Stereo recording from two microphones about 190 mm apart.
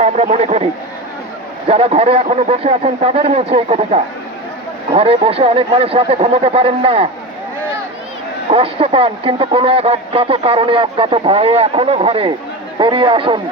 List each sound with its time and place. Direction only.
0.0 s speech: 35° right (ahead or behind)
8.4 s speech: 30° right (ahead or behind)